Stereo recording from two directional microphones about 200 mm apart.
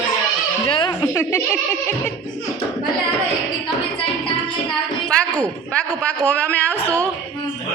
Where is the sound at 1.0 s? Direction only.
15° left (ahead or behind).